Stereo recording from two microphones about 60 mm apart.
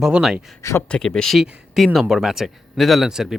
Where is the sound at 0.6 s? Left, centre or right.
Left.